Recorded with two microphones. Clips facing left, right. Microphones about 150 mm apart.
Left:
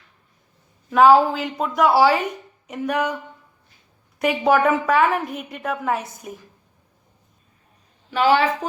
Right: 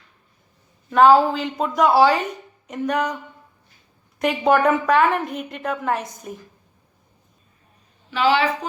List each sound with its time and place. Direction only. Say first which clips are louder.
0.9 s a woman's voice: even; 5° left (ahead or behind)
2.6 s a sound: even; 5° left (ahead or behind)
4.2 s a woman's voice: even; 5° left (ahead or behind)
8.1 s a woman's voice: left 1 dB; 45° left (ahead or behind)